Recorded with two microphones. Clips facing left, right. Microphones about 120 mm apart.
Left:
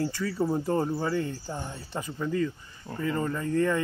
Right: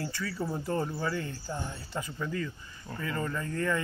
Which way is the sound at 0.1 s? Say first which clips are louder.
Left 6 dB; 35° left (ahead or behind).